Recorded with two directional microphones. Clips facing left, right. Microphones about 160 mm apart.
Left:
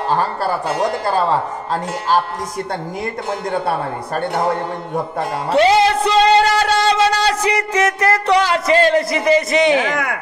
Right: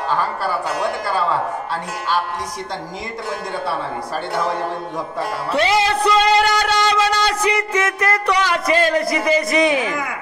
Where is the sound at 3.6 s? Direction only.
55° left (ahead or behind).